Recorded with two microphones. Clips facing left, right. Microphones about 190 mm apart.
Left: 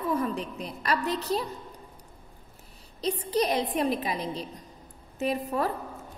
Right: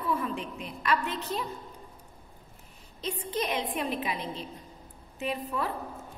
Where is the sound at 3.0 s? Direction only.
35° left (ahead or behind).